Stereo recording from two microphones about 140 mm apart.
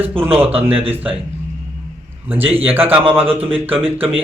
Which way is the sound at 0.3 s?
45° right (ahead or behind).